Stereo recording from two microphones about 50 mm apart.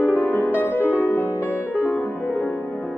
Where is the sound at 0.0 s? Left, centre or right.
Left.